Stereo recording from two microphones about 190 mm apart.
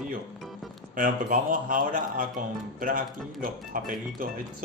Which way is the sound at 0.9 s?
45° right (ahead or behind).